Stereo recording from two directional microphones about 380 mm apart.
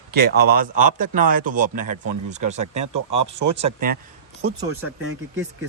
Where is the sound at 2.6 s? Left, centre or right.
Right.